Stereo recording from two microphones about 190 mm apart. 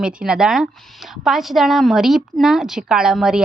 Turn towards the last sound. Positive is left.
turn(degrees=-5)  # may be behind; listen again after turning